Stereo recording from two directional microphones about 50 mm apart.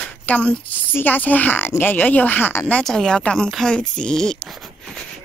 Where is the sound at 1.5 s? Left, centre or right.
Left.